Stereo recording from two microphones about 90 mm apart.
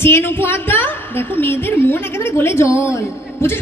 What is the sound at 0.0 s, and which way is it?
A woman's voice, 25° left (ahead or behind).